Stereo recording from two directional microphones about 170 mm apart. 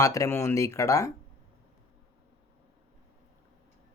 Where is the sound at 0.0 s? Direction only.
20° left (ahead or behind).